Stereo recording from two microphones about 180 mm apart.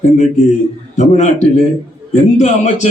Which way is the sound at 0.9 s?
40° left (ahead or behind).